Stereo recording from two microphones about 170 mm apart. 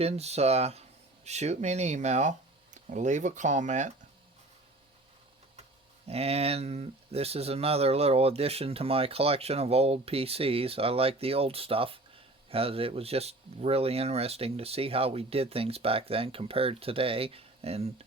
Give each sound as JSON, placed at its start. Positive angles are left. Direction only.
{"t": 0.0, "sound": "speech", "side_deg": -40}
{"t": 6.1, "sound": "speech", "side_deg": -35}